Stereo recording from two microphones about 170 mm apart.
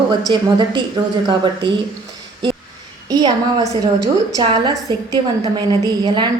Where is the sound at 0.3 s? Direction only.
25° right (ahead or behind).